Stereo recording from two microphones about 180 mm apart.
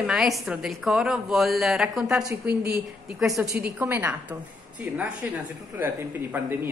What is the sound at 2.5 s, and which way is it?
Speech, 60° right (ahead or behind).